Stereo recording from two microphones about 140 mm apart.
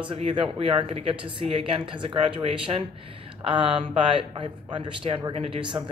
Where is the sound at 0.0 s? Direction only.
35° right (ahead or behind).